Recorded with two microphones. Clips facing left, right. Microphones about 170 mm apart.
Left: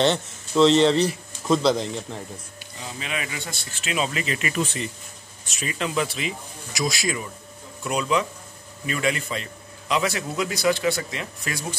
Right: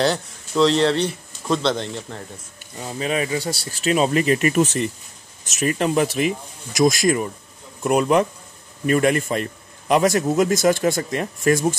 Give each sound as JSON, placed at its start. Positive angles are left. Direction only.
{"t": 0.0, "sound": "speech", "side_deg": 0}
{"t": 2.8, "sound": "a man's voice", "side_deg": -40}